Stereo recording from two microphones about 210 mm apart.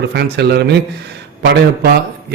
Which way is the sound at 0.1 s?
50° right (ahead or behind).